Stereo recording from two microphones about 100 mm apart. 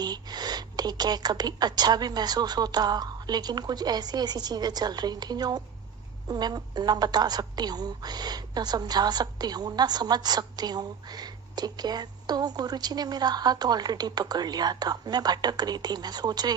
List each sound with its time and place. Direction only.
0.0 s a woman's voice: 45° right (ahead or behind)